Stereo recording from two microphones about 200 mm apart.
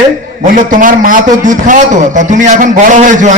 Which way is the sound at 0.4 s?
40° right (ahead or behind).